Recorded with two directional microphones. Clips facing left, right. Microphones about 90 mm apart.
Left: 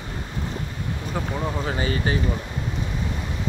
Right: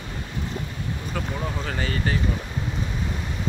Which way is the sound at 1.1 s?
25° left (ahead or behind).